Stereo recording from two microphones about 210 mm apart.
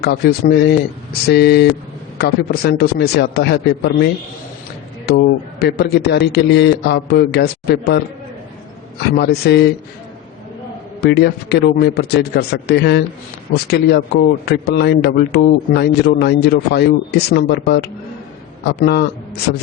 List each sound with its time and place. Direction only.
0.0 s speech: 50° left (ahead or behind)
11.0 s speech: 50° left (ahead or behind)